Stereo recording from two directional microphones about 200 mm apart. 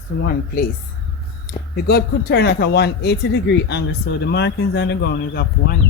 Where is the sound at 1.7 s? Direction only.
50° left (ahead or behind).